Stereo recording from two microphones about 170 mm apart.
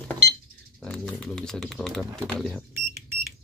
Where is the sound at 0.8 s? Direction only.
5° left (ahead or behind).